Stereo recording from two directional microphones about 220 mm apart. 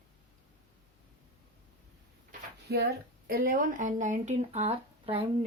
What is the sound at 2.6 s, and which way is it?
A woman's voice, 45° right (ahead or behind).